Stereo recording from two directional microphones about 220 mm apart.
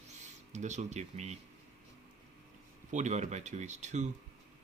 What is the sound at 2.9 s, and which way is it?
Speech, 35° right (ahead or behind).